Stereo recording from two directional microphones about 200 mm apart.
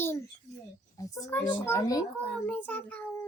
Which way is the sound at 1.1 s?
15° left (ahead or behind).